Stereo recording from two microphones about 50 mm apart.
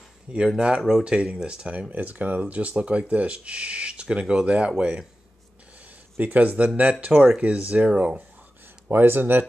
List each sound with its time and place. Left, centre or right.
0.6 s speech: centre
6.1 s speech: right
8.8 s speech: right